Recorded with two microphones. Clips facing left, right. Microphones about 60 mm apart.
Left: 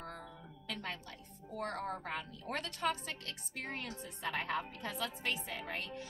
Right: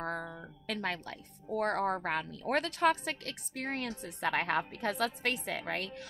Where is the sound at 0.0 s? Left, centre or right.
Right.